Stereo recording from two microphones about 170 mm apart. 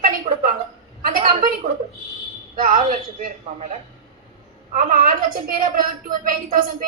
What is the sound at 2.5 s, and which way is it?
Speech, 55° right (ahead or behind).